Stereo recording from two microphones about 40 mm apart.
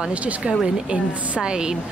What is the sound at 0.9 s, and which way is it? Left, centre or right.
Speech, right.